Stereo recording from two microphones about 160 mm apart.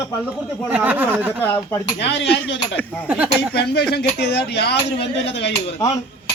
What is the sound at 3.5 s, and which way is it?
Speech, 90° left.